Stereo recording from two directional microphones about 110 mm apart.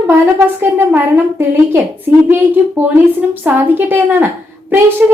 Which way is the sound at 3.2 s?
15° right (ahead or behind).